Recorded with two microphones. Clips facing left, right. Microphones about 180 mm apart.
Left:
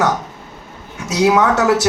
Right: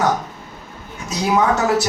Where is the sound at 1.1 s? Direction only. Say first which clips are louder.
Left 4 dB; 80° left.